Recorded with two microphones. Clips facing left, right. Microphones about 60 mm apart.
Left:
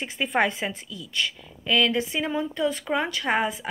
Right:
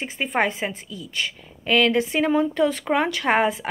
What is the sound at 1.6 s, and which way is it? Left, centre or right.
Speech, right.